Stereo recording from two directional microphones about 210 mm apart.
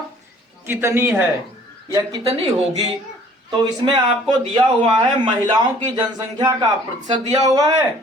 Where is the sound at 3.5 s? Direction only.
25° right (ahead or behind).